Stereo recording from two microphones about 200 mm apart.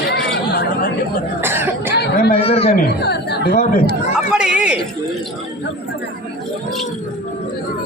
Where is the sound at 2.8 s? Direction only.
55° left (ahead or behind).